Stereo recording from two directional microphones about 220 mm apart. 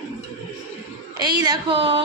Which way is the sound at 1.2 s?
20° right (ahead or behind).